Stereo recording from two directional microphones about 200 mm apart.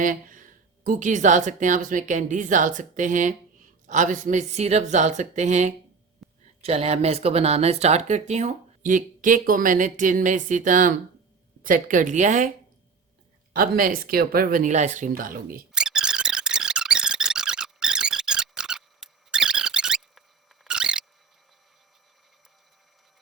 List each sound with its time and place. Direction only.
0.0 s speech: 40° right (ahead or behind)
6.2 s a sound: centre (ahead or behind)
6.6 s speech: 30° right (ahead or behind)
13.5 s speech: 45° right (ahead or behind)
15.7 s squeak: 5° right (ahead or behind)